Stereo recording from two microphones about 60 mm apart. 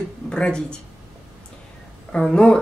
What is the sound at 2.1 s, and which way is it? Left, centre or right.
Speech, centre.